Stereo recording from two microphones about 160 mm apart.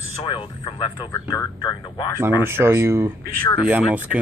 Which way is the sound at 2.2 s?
15° right (ahead or behind).